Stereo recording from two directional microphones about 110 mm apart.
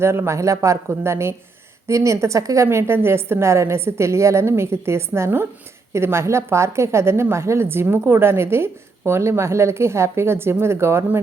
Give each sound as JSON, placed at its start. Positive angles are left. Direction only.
{"t": 0.0, "sound": "a woman's voice", "side_deg": -25}